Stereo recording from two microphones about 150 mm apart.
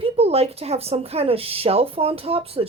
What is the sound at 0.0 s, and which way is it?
Speech, 45° right (ahead or behind).